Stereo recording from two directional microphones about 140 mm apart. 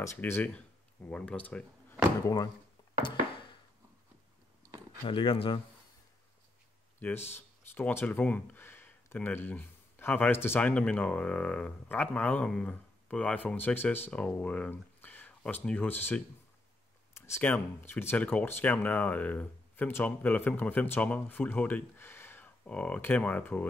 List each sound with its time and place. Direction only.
0.0 s speech: 20° left (ahead or behind)
2.2 s speech: 25° left (ahead or behind)
3.0 s a sound: 35° left (ahead or behind)
5.0 s speech: 40° left (ahead or behind)
7.0 s speech: 15° left (ahead or behind)